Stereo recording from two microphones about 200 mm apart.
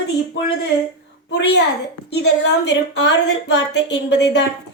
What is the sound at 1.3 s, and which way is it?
Speech, 60° left (ahead or behind).